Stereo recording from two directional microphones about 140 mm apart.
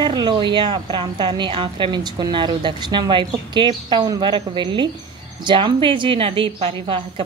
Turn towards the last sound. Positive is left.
turn(degrees=-40)  # may be behind; listen again after turning